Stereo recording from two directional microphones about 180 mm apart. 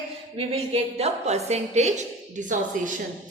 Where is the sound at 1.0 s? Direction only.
35° right (ahead or behind).